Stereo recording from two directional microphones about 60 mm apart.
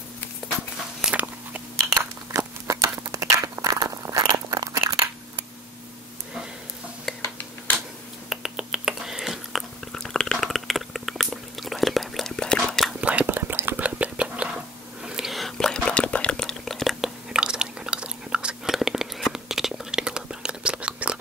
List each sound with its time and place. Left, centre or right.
1.1 s biting: right
1.9 s a sound: right
4.1 s crunch: right
7.1 s a sound: centre
8.3 s finger snapping: centre
9.9 s a sound: centre
12.4 s whispering: centre
13.0 s whispering: right
13.4 s a sound: right; by 14.5 s centre
15.0 s whispering: centre
17.0 s chewing: centre
18.7 s whispering: centre